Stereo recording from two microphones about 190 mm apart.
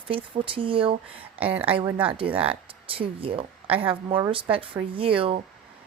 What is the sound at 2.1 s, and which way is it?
Speech, 30° right (ahead or behind).